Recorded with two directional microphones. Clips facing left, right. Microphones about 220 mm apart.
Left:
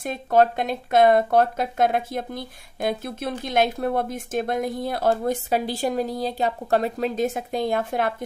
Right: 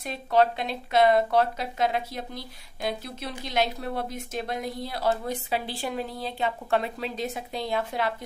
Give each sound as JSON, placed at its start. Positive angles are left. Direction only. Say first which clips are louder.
{"t": 0.0, "sound": "speech", "louder": "left 4 dB", "side_deg": 50}